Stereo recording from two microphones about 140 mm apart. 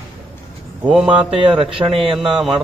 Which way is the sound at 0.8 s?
5° right (ahead or behind).